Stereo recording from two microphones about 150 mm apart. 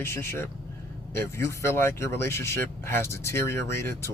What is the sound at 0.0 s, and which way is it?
Speech, 15° left (ahead or behind).